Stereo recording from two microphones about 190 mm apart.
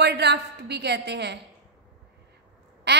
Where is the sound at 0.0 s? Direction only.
65° right (ahead or behind).